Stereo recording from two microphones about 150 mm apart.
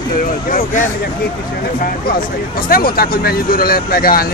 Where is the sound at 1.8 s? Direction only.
75° left (ahead or behind).